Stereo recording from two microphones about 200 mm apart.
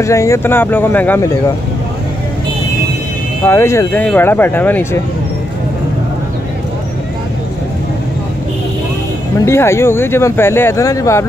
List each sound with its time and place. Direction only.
0.0 s speech: 15° left (ahead or behind)
3.4 s speech: 15° left (ahead or behind)
9.4 s speech: 15° left (ahead or behind)